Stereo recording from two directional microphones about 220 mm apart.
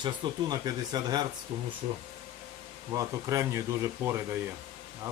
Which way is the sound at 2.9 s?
15° right (ahead or behind).